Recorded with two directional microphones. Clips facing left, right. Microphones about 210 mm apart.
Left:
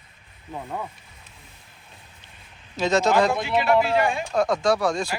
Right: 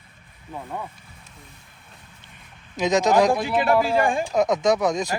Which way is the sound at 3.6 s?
50° right (ahead or behind).